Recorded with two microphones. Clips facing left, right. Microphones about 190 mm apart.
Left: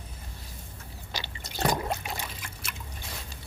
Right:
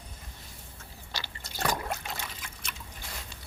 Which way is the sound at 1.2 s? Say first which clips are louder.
Left 4 dB; 20° left (ahead or behind).